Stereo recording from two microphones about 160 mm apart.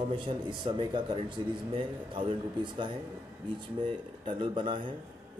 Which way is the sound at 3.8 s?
30° right (ahead or behind).